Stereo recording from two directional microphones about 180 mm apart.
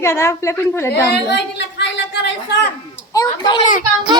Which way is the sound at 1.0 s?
70° left (ahead or behind).